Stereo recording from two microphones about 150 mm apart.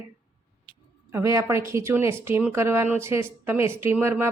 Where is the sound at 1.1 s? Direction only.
20° right (ahead or behind).